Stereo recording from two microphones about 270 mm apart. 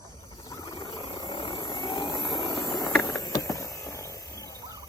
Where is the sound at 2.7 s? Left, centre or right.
Centre.